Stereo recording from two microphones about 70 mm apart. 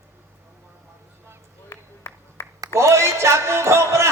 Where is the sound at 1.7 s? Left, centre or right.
Left.